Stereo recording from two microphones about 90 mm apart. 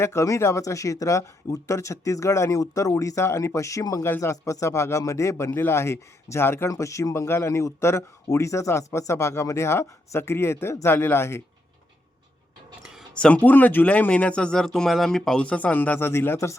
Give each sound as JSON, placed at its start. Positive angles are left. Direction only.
{"t": 0.0, "sound": "speech", "side_deg": 30}
{"t": 12.8, "sound": "a sound", "side_deg": -5}
{"t": 13.1, "sound": "speech", "side_deg": 15}